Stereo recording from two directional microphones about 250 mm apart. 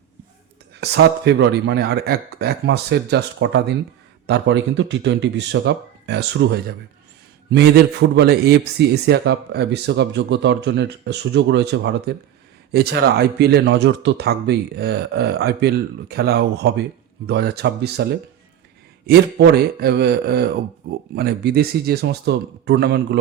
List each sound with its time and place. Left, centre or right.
0.8 s a man's voice: right
19.0 s speech: right